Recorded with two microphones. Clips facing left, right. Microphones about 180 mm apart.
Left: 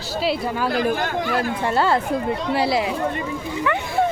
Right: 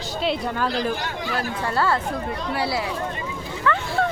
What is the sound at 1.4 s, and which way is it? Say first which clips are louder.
Speech: left 1 dB; 20° left (ahead or behind).